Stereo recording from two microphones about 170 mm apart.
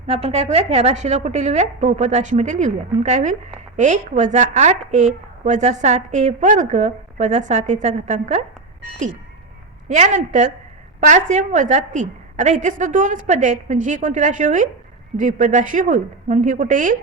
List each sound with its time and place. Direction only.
0.1 s a woman's voice: 40° right (ahead or behind)
9.9 s a woman's voice: 45° right (ahead or behind)